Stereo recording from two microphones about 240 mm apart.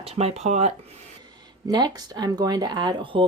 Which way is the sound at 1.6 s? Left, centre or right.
Centre.